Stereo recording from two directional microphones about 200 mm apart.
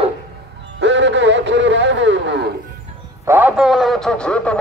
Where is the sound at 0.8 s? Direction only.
65° right (ahead or behind).